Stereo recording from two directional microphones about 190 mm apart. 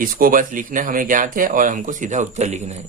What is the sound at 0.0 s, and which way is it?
Speech, 50° right (ahead or behind).